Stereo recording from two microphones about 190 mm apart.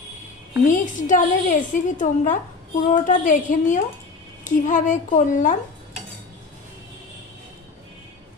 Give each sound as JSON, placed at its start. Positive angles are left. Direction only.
{"t": 0.7, "sound": "a woman's voice", "side_deg": 40}